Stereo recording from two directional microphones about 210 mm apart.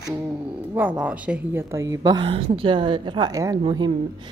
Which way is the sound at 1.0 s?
5° right (ahead or behind).